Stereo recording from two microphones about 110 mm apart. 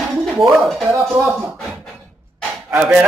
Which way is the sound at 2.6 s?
10° right (ahead or behind).